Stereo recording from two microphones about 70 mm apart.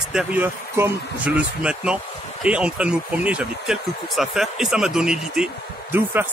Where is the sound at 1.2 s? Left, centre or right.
Centre.